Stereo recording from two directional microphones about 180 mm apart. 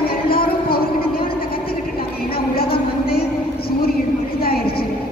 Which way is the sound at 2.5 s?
55° left (ahead or behind).